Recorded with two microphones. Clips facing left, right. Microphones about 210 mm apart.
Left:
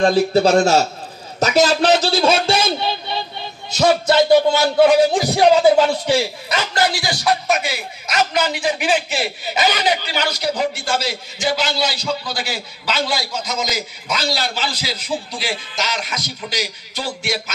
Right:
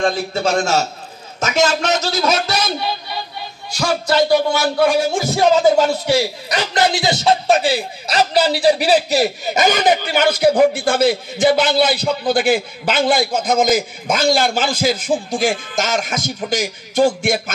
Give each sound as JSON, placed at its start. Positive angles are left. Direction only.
{"t": 0.0, "sound": "a man's voice", "side_deg": 35}
{"t": 4.8, "sound": "music", "side_deg": 15}
{"t": 6.0, "sound": "a man's voice", "side_deg": -10}